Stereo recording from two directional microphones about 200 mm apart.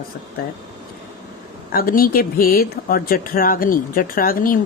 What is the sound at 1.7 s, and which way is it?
A woman's voice, 45° left (ahead or behind).